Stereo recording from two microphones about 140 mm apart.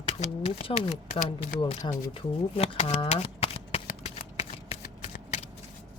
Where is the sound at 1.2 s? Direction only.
60° left (ahead or behind).